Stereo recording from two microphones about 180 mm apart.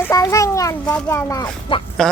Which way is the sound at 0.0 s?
15° left (ahead or behind).